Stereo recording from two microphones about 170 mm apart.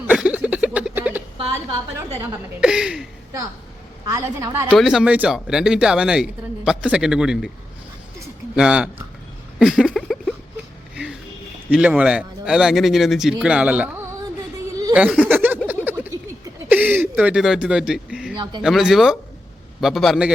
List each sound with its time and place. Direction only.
0.1 s a sound: 5° right (ahead or behind)
2.6 s speech: 5° right (ahead or behind)
4.1 s a woman's voice: 20° right (ahead or behind)
4.7 s speech: centre (ahead or behind)
8.5 s speech: 5° right (ahead or behind)
9.6 s a sound: centre (ahead or behind)
10.9 s music: 5° right (ahead or behind)
11.7 s speech: 10° right (ahead or behind)
14.9 s a sound: 5° right (ahead or behind)
18.6 s speech: 5° right (ahead or behind)